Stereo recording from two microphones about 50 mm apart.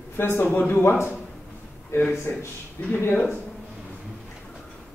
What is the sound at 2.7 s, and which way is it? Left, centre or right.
Speech, left.